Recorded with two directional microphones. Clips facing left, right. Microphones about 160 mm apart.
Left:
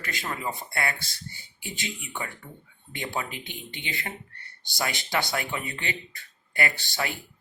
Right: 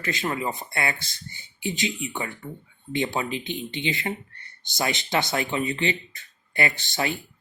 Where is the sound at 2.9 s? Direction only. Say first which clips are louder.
Right 7 dB; 20° right (ahead or behind).